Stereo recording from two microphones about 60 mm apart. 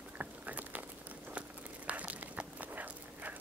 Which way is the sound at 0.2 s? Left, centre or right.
Right.